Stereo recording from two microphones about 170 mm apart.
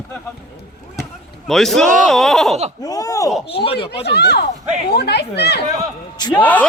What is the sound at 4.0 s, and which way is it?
Speech, 75° left (ahead or behind).